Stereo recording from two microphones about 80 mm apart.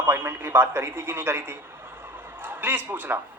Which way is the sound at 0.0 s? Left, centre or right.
Right.